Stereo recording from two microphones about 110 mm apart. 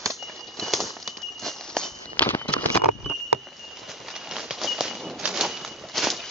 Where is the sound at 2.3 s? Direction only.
15° left (ahead or behind).